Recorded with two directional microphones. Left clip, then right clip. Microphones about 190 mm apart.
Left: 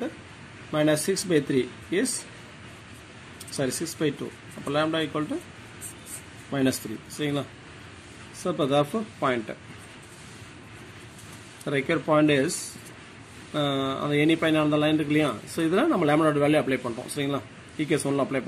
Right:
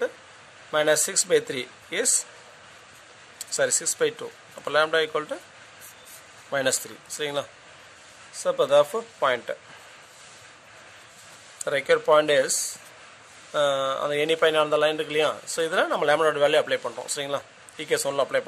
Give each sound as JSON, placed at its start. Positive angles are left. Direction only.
{"t": 0.7, "sound": "speech", "side_deg": -65}
{"t": 3.5, "sound": "speech", "side_deg": -60}
{"t": 6.5, "sound": "speech", "side_deg": -60}
{"t": 8.5, "sound": "speech", "side_deg": -60}
{"t": 11.6, "sound": "speech", "side_deg": -60}
{"t": 13.5, "sound": "speech", "side_deg": -60}